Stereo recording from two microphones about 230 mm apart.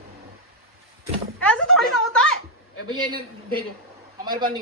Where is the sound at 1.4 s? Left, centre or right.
Centre.